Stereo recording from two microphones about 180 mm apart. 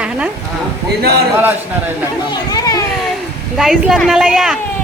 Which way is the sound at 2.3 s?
20° left (ahead or behind).